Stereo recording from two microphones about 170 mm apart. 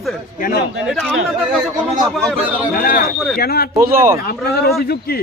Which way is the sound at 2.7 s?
60° left (ahead or behind).